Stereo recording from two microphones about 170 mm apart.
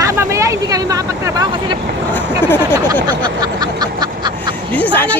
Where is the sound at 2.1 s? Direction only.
10° left (ahead or behind).